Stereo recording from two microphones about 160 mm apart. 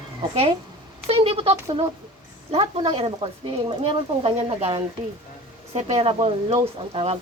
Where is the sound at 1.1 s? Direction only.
35° right (ahead or behind).